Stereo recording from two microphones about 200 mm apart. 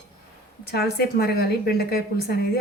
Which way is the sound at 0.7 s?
50° left (ahead or behind).